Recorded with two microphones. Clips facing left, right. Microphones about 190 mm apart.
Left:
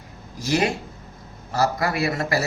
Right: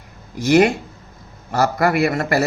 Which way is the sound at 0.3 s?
65° right (ahead or behind).